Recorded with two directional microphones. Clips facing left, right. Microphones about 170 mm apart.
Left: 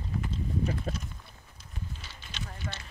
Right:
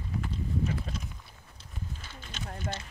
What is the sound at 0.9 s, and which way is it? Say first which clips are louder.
Clip-clop: left 4 dB; 45° left (ahead or behind).